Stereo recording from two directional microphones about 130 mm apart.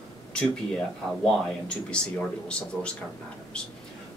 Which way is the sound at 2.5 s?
10° left (ahead or behind).